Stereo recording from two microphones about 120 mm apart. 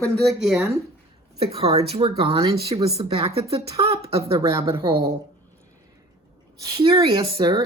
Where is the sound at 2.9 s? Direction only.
55° right (ahead or behind).